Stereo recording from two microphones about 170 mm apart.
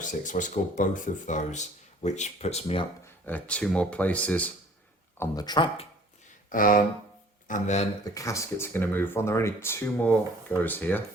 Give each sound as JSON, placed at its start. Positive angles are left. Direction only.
{"t": 0.0, "sound": "speech", "side_deg": 50}
{"t": 3.2, "sound": "speech", "side_deg": 10}
{"t": 6.5, "sound": "speech", "side_deg": 55}
{"t": 8.1, "sound": "speech", "side_deg": 20}